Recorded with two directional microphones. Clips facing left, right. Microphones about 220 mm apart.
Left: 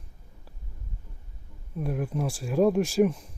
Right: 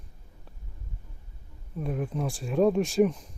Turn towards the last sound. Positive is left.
turn(degrees=5)  # may be behind; listen again after turning